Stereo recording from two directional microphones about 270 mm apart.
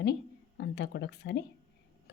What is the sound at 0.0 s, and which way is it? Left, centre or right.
A woman's voice, left.